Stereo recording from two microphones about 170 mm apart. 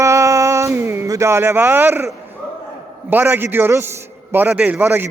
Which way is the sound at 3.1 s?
10° right (ahead or behind).